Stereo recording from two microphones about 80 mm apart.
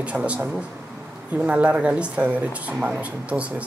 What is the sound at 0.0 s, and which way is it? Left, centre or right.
Speech, centre.